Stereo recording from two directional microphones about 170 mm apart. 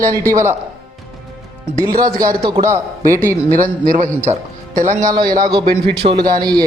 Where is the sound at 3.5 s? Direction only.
50° right (ahead or behind).